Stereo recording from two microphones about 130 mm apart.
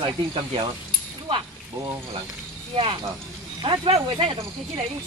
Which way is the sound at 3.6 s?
40° right (ahead or behind).